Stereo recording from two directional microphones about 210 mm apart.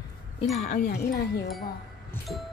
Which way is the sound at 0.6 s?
35° left (ahead or behind).